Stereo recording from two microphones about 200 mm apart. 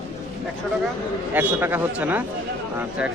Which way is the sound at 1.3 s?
10° right (ahead or behind).